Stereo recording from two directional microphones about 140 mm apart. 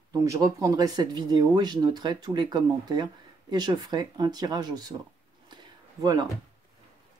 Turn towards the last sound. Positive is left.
turn(degrees=-30)  # may be behind; listen again after turning